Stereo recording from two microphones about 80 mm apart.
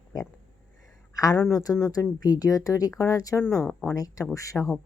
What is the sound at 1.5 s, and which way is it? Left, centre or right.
Speech, left.